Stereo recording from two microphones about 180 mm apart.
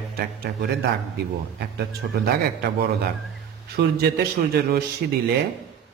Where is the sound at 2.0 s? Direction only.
60° right (ahead or behind).